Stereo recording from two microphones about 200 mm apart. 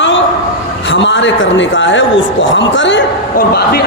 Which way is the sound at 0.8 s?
65° left (ahead or behind).